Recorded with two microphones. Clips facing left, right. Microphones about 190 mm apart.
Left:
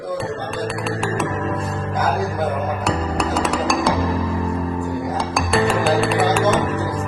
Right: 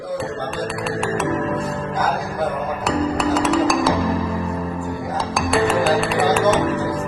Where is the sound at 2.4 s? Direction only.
Centre (ahead or behind).